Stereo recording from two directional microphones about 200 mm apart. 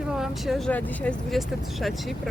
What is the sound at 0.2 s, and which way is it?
Speech, centre (ahead or behind).